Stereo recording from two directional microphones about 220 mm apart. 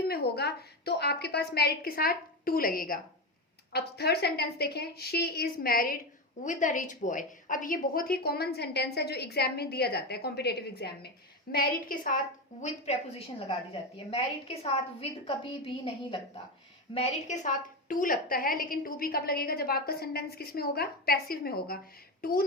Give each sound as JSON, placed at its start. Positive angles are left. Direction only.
{"t": 0.1, "sound": "a woman's voice", "side_deg": 45}
{"t": 12.6, "sound": "a woman's voice", "side_deg": 30}